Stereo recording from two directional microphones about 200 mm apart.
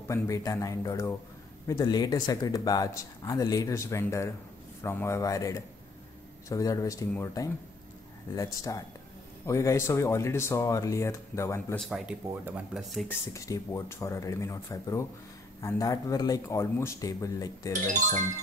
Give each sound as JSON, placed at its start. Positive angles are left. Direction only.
{"t": 0.1, "sound": "speech", "side_deg": 15}
{"t": 11.8, "sound": "speech", "side_deg": -5}
{"t": 13.3, "sound": "speech", "side_deg": 15}